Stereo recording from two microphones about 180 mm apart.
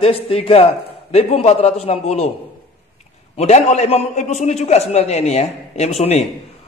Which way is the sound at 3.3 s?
40° left (ahead or behind).